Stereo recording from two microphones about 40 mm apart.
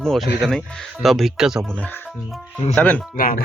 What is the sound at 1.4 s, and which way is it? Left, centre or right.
Speech, centre.